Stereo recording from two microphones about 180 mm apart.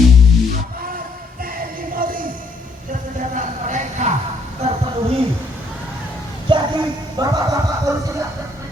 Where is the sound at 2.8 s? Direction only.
45° right (ahead or behind).